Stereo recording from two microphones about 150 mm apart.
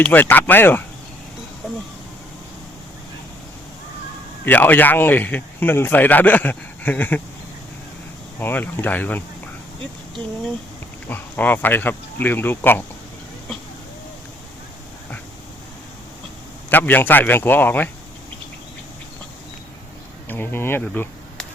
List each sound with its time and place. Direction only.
0.0 s speech: 10° left (ahead or behind)
4.4 s speech: 10° left (ahead or behind)
8.4 s speech: 15° left (ahead or behind)
11.1 s speech: 10° left (ahead or behind)
16.6 s speech: 10° left (ahead or behind)
20.2 s speech: 10° left (ahead or behind)